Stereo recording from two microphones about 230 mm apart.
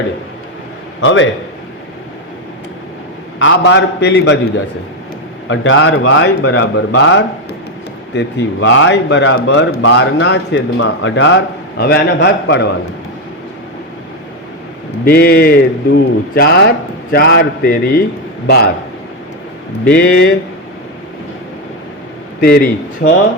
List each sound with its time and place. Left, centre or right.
1.0 s a man's voice: left
3.3 s a man's voice: left
15.0 s a man's voice: left
20.0 s a man's voice: left
22.4 s a man's voice: left